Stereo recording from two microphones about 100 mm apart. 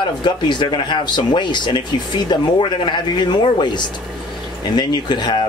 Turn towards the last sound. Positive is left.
turn(degrees=50)  # may be behind; listen again after turning